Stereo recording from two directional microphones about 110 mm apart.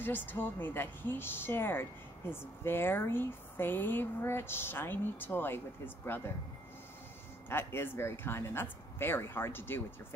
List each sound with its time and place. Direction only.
0.0 s speech: 20° left (ahead or behind)
7.4 s speech: 20° left (ahead or behind)